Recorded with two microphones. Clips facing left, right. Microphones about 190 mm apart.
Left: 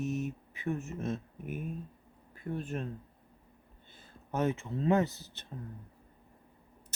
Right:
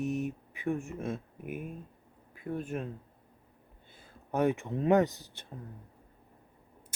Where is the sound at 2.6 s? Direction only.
10° right (ahead or behind).